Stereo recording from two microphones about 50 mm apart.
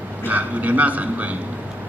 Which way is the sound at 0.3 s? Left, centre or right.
Right.